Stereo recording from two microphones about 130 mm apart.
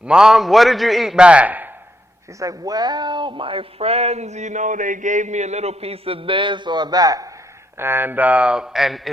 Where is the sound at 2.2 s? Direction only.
25° right (ahead or behind).